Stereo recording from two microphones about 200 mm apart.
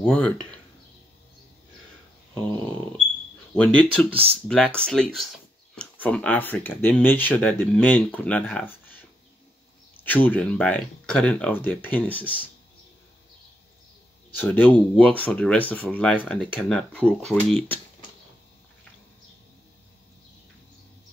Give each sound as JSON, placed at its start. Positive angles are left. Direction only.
{"t": 0.0, "sound": "speech", "side_deg": 5}
{"t": 3.5, "sound": "speech", "side_deg": 5}
{"t": 4.1, "sound": "speech", "side_deg": -30}
{"t": 4.5, "sound": "speech", "side_deg": 5}
{"t": 10.0, "sound": "speech", "side_deg": 10}
{"t": 14.3, "sound": "speech", "side_deg": 10}